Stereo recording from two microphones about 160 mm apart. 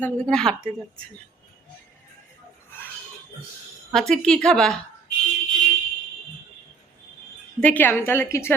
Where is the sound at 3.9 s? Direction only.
5° left (ahead or behind).